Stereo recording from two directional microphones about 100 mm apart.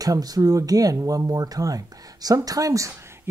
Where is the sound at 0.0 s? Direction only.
40° right (ahead or behind).